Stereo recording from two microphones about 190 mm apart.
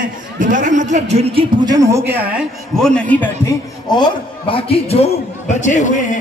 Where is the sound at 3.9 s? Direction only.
25° left (ahead or behind).